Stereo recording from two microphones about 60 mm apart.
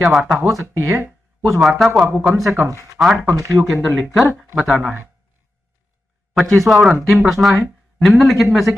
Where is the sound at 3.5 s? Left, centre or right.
Centre.